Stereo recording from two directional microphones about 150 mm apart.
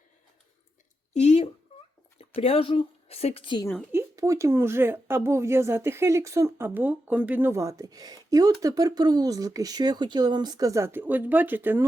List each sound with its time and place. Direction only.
1.1 s speech: 45° left (ahead or behind)
3.9 s speech: 20° right (ahead or behind)